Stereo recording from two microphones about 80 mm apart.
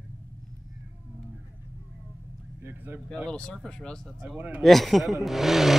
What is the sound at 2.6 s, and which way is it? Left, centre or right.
Vehicle, right.